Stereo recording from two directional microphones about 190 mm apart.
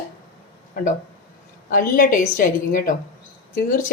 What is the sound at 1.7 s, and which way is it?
A woman's voice, 45° left (ahead or behind).